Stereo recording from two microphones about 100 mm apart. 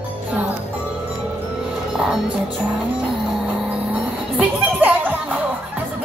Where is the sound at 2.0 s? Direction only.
5° right (ahead or behind).